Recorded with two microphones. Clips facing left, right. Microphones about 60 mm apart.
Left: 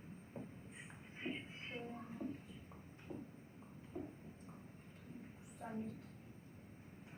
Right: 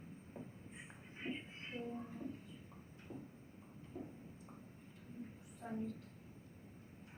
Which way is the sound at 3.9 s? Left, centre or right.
Left.